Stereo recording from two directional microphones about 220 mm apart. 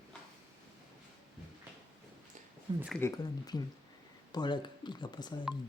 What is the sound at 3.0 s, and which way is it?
Speech, 15° left (ahead or behind).